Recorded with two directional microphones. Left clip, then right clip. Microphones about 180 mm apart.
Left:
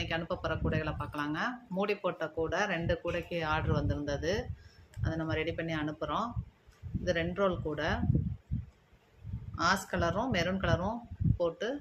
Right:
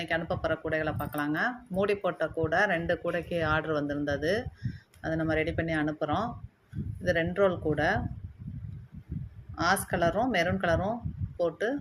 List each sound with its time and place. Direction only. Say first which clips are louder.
0.0 s speech: right 4 dB; 20° right (ahead or behind)
9.6 s speech: right 3 dB; 25° right (ahead or behind)